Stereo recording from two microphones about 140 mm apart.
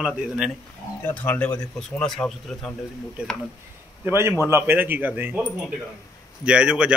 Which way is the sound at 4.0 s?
15° right (ahead or behind).